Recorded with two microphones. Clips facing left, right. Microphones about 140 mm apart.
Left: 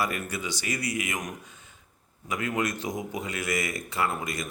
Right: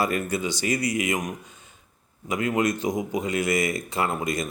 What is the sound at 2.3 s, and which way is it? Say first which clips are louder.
Speech: right 5 dB; 25° right (ahead or behind).